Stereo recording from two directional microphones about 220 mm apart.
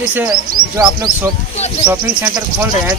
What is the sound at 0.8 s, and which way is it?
Speech, 20° right (ahead or behind).